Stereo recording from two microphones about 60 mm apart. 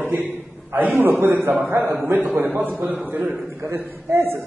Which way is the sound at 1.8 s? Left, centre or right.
Right.